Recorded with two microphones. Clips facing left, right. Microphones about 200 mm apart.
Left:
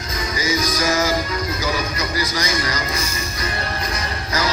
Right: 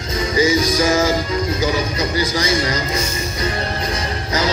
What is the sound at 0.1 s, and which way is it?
Music, 25° right (ahead or behind).